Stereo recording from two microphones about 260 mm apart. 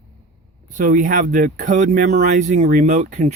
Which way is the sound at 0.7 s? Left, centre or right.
Right.